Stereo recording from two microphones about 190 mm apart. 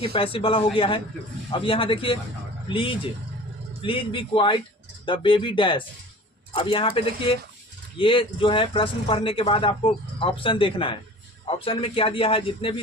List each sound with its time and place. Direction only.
0.0 s speech: 30° left (ahead or behind)